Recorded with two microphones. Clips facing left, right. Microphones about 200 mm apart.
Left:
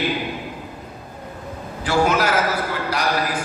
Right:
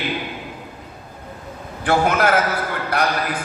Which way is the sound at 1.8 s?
55° right (ahead or behind).